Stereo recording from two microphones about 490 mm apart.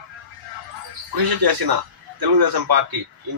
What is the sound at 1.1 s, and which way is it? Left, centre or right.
Speech, right.